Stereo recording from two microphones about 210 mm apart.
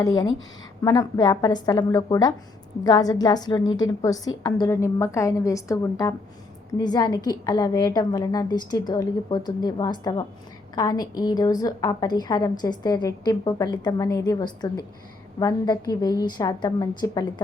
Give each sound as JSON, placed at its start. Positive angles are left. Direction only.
{"t": 0.0, "sound": "a woman's voice", "side_deg": 20}